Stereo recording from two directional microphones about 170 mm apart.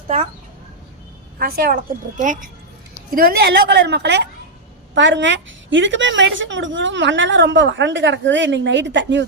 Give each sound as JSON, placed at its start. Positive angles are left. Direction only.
{"t": 1.4, "sound": "a woman's voice", "side_deg": -60}
{"t": 3.1, "sound": "a woman's voice", "side_deg": -60}